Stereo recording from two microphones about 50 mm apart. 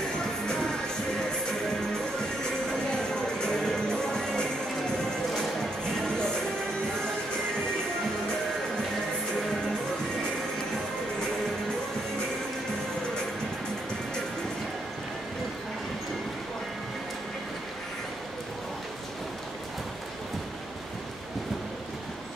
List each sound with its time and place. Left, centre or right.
0.5 s music: centre
3.1 s music: centre
6.0 s music: centre